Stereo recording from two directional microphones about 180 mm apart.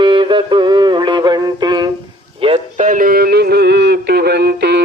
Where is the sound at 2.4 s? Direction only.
30° right (ahead or behind).